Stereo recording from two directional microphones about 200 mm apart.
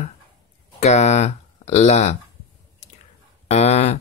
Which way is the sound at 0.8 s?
35° left (ahead or behind).